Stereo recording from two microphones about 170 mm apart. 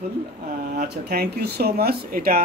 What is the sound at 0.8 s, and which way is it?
Speech, 70° right (ahead or behind).